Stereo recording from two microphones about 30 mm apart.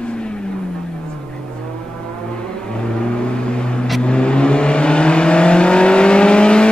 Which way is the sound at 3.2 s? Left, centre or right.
Left.